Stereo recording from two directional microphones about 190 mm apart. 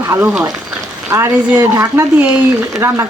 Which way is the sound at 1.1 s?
15° right (ahead or behind).